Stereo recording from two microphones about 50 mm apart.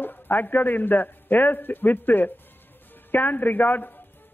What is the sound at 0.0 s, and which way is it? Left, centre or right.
A man's voice, left.